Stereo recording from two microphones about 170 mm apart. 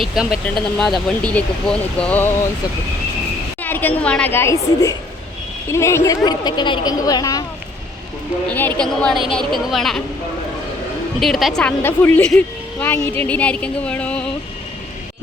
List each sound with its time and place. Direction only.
0.0 s a woman's voice: 5° right (ahead or behind)
3.6 s a woman's voice: 10° left (ahead or behind)
8.4 s a woman's voice: 10° left (ahead or behind)
11.2 s a woman's voice: centre (ahead or behind)
11.8 s speech: 15° left (ahead or behind)